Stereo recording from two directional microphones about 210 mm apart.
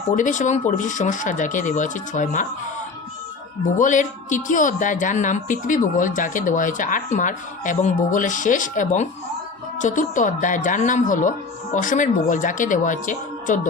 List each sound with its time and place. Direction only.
0.2 s speech: 35° left (ahead or behind)
3.8 s speech: 35° left (ahead or behind)